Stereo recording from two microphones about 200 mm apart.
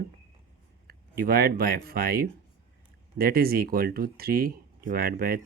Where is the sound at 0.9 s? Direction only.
50° right (ahead or behind).